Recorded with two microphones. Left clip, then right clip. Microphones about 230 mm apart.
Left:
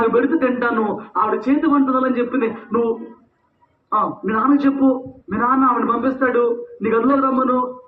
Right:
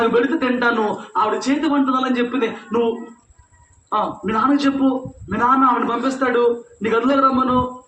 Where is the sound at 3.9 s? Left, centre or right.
Right.